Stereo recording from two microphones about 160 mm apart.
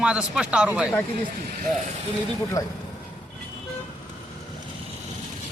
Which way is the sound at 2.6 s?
20° left (ahead or behind).